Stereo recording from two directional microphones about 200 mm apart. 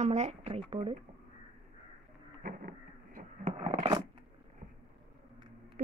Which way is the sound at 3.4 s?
30° right (ahead or behind).